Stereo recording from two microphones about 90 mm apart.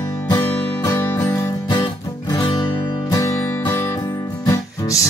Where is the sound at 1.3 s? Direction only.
45° left (ahead or behind).